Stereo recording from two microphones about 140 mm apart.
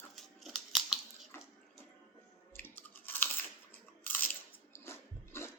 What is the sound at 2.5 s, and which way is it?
Chewing, 15° left (ahead or behind).